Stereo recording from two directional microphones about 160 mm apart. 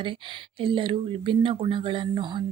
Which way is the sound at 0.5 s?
30° right (ahead or behind).